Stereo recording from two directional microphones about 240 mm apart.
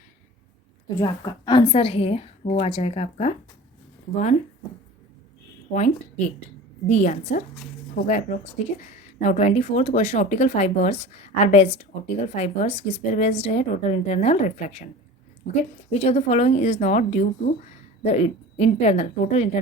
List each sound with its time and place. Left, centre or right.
0.9 s speech: centre
5.7 s a woman's voice: left
15.9 s speech: left